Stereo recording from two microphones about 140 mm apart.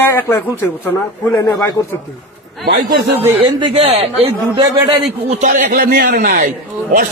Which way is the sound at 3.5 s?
35° right (ahead or behind).